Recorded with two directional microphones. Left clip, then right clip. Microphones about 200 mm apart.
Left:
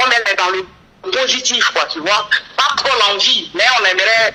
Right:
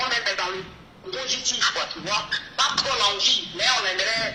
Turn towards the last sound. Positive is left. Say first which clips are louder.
# left 12 dB
turn(degrees=50)  # may be behind; listen again after turning